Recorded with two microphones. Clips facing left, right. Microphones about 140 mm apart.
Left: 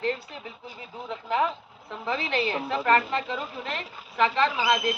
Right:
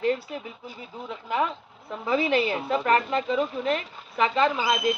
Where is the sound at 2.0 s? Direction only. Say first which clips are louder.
Right 5 dB; 5° right (ahead or behind).